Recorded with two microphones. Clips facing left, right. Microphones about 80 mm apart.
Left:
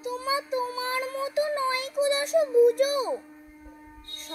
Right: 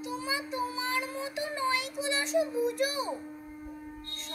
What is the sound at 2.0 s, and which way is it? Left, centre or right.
A child's voice, left.